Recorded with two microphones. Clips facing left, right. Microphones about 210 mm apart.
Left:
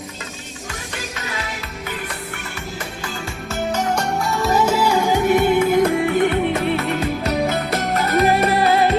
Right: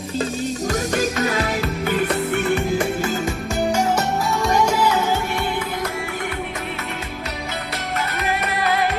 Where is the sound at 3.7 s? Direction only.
10° right (ahead or behind).